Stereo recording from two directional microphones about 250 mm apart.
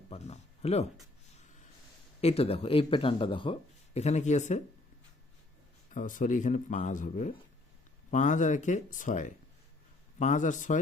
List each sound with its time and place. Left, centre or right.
0.1 s a sound: left
2.2 s speech: left
5.9 s speech: left